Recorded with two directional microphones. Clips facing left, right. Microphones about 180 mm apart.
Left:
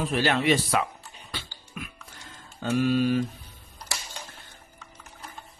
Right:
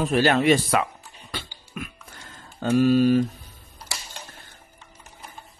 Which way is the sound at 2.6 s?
40° right (ahead or behind).